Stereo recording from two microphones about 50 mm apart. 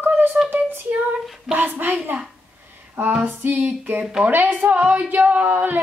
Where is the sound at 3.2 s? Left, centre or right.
Right.